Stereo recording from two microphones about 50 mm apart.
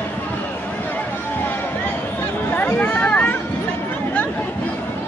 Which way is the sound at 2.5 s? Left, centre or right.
Left.